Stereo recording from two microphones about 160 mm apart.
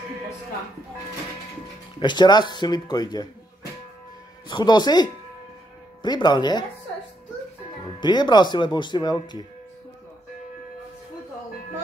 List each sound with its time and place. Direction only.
2.0 s speech: 30° left (ahead or behind)
4.5 s speech: 30° left (ahead or behind)
8.0 s speech: 25° left (ahead or behind)